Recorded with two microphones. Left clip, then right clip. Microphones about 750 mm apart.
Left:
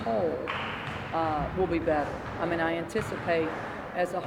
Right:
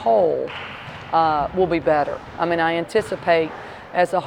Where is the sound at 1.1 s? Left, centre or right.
Right.